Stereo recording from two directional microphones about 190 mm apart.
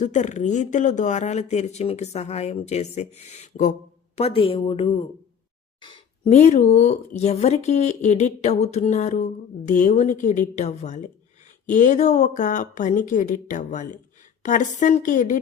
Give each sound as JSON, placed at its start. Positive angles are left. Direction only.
{"t": 0.0, "sound": "a woman's voice", "side_deg": 40}